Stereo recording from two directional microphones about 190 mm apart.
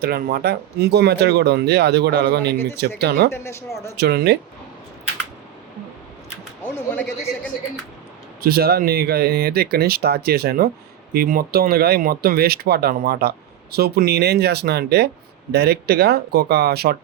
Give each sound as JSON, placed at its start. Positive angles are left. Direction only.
{"t": 0.0, "sound": "speech", "side_deg": -55}
{"t": 3.3, "sound": "speech", "side_deg": 15}
{"t": 3.9, "sound": "speech", "side_deg": -55}
{"t": 6.7, "sound": "a sound", "side_deg": 10}
{"t": 8.4, "sound": "speech", "side_deg": -55}